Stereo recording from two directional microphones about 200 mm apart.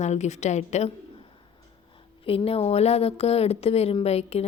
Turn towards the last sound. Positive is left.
turn(degrees=30)  # may be behind; listen again after turning